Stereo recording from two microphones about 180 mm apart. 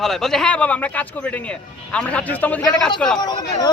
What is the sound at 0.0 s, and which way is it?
Speech, centre (ahead or behind).